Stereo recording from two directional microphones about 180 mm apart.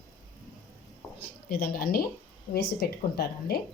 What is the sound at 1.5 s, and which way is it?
Speech, 55° left (ahead or behind).